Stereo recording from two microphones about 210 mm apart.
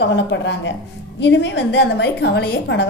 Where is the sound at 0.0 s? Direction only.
60° left (ahead or behind).